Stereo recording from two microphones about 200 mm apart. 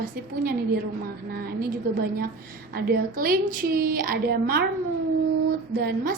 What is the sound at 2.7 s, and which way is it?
A woman's voice, 45° right (ahead or behind).